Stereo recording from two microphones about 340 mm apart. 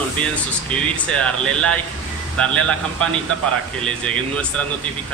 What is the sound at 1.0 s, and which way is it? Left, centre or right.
Speech, centre.